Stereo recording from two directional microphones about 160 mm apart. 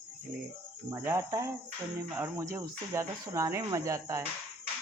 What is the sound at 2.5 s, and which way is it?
Speech, 20° right (ahead or behind).